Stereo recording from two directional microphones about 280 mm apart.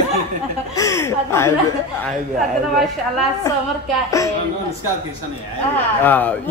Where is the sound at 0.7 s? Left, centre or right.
Centre.